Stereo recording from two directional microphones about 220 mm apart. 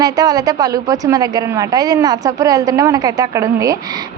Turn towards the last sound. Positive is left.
turn(degrees=-15)  # may be behind; listen again after turning